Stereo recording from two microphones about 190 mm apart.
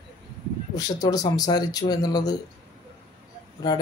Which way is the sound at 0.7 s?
20° left (ahead or behind).